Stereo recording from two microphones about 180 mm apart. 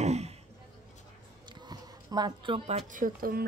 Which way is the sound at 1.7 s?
25° right (ahead or behind).